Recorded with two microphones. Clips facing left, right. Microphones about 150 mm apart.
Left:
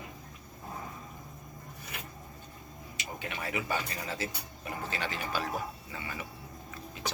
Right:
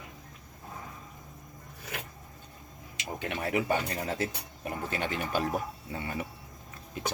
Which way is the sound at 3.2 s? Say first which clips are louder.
Right 6 dB; 60° right (ahead or behind).